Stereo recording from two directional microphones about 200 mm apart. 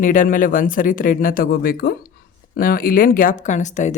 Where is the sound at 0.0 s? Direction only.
40° left (ahead or behind).